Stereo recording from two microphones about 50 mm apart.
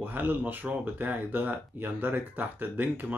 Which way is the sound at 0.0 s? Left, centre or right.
Right.